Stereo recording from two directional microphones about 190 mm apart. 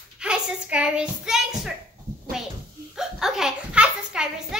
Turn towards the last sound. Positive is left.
turn(degrees=-5)  # may be behind; listen again after turning